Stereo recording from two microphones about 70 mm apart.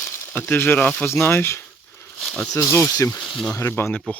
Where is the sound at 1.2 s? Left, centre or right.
Left.